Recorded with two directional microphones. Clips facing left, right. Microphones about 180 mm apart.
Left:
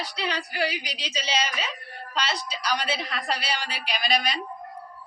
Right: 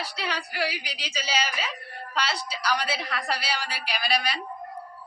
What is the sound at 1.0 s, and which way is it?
A woman's voice, 25° left (ahead or behind).